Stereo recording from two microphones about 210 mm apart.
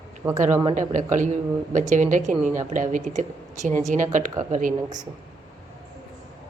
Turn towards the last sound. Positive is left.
turn(degrees=-35)  # may be behind; listen again after turning